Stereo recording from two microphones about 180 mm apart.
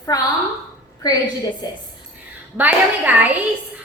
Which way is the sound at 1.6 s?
25° left (ahead or behind).